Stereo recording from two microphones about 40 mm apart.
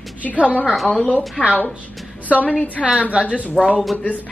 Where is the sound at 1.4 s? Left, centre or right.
Left.